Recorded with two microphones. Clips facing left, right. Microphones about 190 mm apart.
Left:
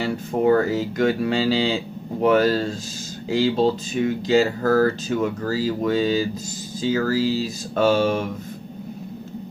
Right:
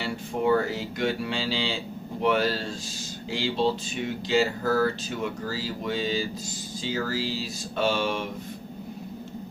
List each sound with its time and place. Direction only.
0.0 s speech: 45° left (ahead or behind)